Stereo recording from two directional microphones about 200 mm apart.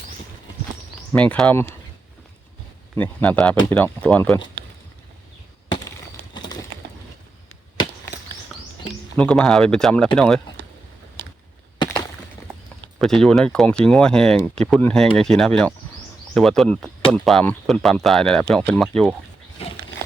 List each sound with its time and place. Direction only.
1.1 s speech: 5° left (ahead or behind)
2.9 s speech: 10° left (ahead or behind)
6.3 s horse: 20° left (ahead or behind)
9.1 s speech: 5° left (ahead or behind)
11.2 s a sound: 55° right (ahead or behind)
13.0 s speech: centre (ahead or behind)